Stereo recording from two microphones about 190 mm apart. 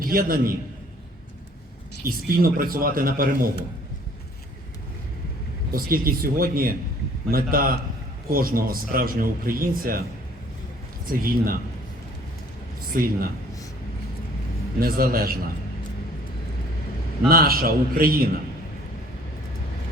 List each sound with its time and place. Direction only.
0.0 s a man's voice: 50° right (ahead or behind)
2.0 s speech: 50° right (ahead or behind)
5.7 s speech: 50° right (ahead or behind)
11.1 s speech: 50° right (ahead or behind)
12.9 s speech: 50° right (ahead or behind)
14.8 s speech: 50° right (ahead or behind)
17.2 s speech: 50° right (ahead or behind)